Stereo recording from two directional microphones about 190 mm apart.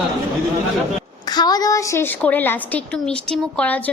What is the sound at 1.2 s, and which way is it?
A woman's voice, 20° left (ahead or behind).